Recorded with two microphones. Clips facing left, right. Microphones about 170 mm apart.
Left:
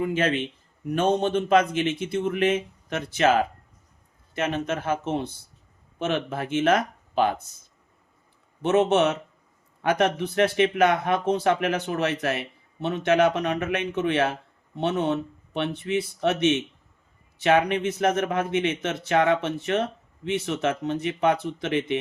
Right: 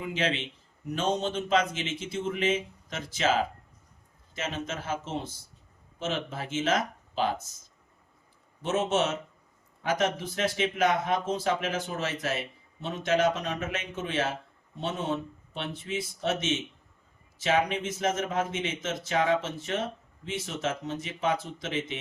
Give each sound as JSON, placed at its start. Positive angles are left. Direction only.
{"t": 0.0, "sound": "speech", "side_deg": 50}
{"t": 8.6, "sound": "speech", "side_deg": 60}